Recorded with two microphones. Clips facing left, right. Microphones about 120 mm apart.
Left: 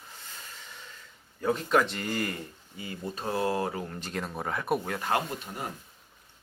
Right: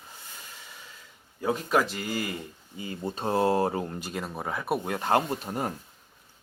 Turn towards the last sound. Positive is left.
turn(degrees=-40)  # may be behind; listen again after turning